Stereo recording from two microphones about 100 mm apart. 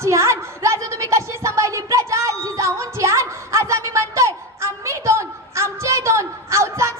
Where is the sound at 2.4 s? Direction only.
30° right (ahead or behind).